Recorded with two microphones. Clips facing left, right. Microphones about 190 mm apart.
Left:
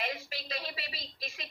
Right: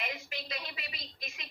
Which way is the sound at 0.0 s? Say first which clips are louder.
Left 3 dB; 35° left (ahead or behind).